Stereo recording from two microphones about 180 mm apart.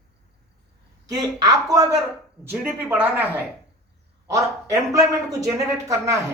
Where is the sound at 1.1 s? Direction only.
20° right (ahead or behind).